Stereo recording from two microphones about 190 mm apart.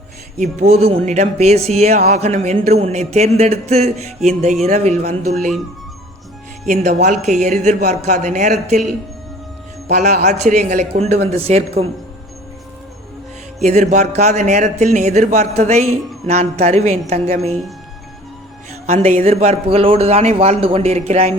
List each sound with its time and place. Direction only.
0.3 s speech: 35° right (ahead or behind)
6.7 s speech: 40° right (ahead or behind)
9.9 s speech: 40° right (ahead or behind)
13.6 s speech: 35° right (ahead or behind)
18.9 s speech: 35° right (ahead or behind)